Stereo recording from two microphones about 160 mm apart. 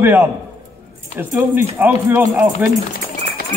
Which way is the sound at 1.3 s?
15° right (ahead or behind).